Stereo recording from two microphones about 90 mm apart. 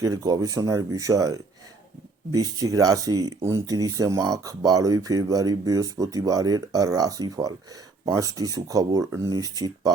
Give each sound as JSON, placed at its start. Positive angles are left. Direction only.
{"t": 0.0, "sound": "speech", "side_deg": -40}